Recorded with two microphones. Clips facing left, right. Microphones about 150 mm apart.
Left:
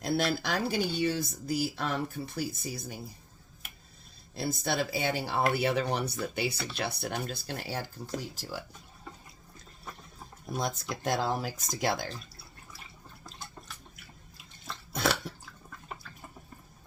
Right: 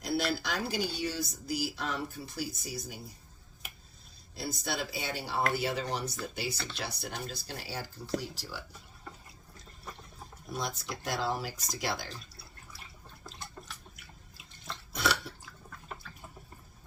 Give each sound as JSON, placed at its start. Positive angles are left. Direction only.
{"t": 0.0, "sound": "speech", "side_deg": 55}
{"t": 4.4, "sound": "speech", "side_deg": 55}
{"t": 10.6, "sound": "speech", "side_deg": 50}
{"t": 13.2, "sound": "drip", "side_deg": 0}
{"t": 16.0, "sound": "water", "side_deg": 0}